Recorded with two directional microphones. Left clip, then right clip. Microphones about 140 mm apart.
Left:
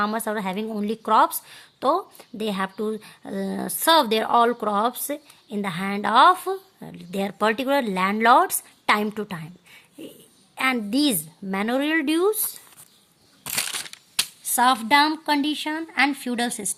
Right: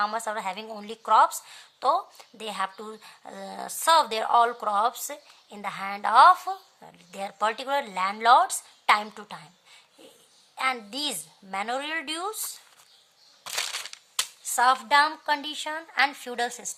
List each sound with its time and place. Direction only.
0.0 s a woman's voice: 30° left (ahead or behind)
10.5 s a woman's voice: 35° left (ahead or behind)
14.2 s speech: 25° left (ahead or behind)